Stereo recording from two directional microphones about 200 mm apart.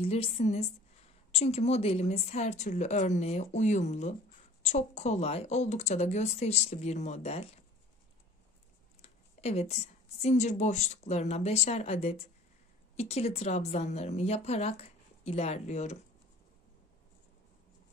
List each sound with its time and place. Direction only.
0.0 s a woman's voice: 30° left (ahead or behind)
9.0 s a woman's voice: 30° left (ahead or behind)